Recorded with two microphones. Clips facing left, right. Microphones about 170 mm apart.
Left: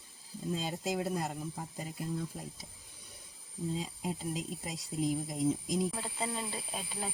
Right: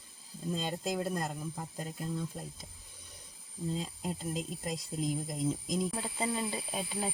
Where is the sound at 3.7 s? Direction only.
5° left (ahead or behind).